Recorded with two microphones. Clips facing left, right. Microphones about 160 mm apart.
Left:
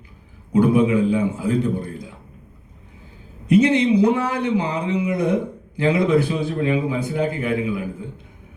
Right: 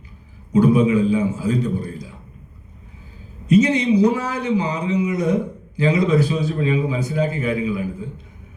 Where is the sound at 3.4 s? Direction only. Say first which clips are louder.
Even; 55° left (ahead or behind).